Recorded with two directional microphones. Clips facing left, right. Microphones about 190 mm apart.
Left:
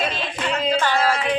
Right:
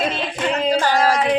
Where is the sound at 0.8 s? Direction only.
40° right (ahead or behind).